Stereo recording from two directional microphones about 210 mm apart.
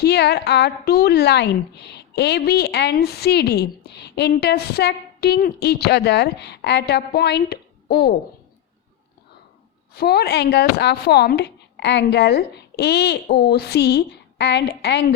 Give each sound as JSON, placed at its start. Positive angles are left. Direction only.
{"t": 0.0, "sound": "a woman's voice", "side_deg": 50}
{"t": 9.9, "sound": "a woman's voice", "side_deg": 50}